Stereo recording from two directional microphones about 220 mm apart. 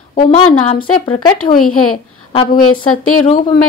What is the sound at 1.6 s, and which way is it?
A woman's voice, 85° left.